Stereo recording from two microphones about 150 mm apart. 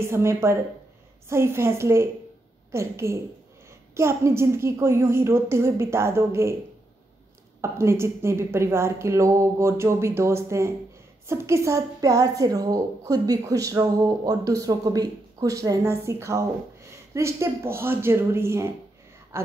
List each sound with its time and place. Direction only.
0.0 s a woman's voice: 15° right (ahead or behind)
7.6 s a woman's voice: 15° right (ahead or behind)